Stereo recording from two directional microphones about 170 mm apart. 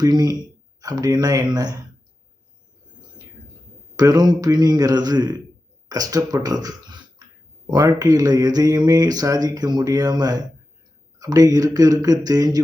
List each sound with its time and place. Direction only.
0.0 s speech: 20° right (ahead or behind)
3.9 s speech: 20° right (ahead or behind)